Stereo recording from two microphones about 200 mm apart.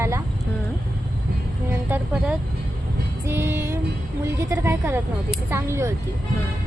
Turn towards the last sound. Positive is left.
turn(degrees=-15)  # may be behind; listen again after turning